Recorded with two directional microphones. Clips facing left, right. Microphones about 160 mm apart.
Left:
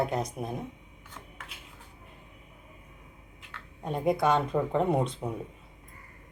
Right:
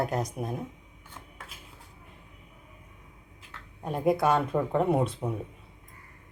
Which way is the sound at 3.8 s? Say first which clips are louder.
Right 1 dB; centre (ahead or behind).